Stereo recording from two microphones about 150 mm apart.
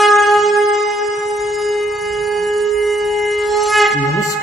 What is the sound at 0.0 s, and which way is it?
Shofar, centre (ahead or behind).